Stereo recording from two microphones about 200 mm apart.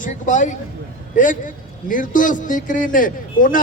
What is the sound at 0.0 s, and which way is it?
A man's voice, 40° left (ahead or behind).